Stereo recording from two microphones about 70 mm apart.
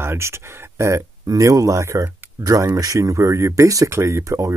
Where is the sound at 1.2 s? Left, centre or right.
Right.